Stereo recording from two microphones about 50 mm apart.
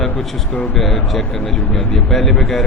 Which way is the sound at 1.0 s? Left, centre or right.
Centre.